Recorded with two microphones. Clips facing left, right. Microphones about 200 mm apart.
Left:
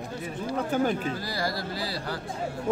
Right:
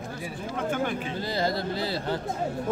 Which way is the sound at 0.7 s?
40° left (ahead or behind).